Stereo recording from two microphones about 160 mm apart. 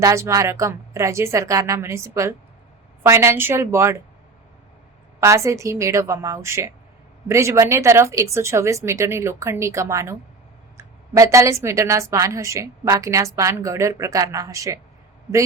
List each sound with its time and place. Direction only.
0.0 s a woman's voice: 20° right (ahead or behind)
5.2 s a woman's voice: 20° right (ahead or behind)